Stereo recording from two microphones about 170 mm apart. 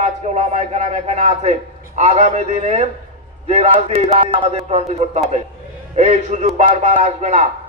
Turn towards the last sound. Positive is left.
turn(degrees=-40)  # may be behind; listen again after turning